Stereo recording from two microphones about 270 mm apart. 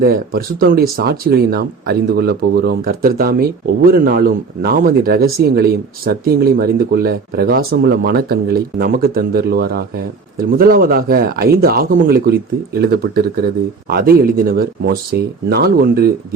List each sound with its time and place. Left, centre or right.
0.0 s speech: right